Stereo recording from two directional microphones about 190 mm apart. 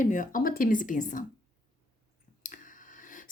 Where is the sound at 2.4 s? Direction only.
45° left (ahead or behind).